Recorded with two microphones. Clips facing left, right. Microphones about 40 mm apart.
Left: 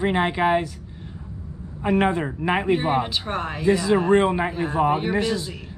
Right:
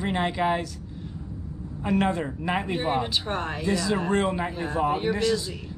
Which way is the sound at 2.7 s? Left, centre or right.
Centre.